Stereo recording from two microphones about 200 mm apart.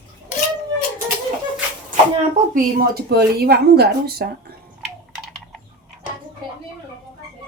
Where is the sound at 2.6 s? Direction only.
50° right (ahead or behind).